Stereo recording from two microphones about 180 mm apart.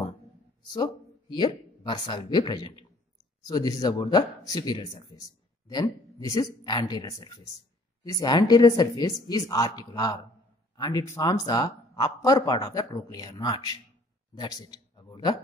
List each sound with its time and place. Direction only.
1.3 s a man's voice: 25° left (ahead or behind)